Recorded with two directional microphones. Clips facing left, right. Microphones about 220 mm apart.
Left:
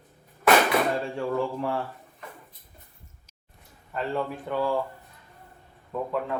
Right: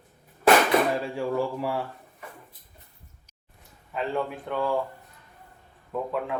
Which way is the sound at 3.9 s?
Centre (ahead or behind).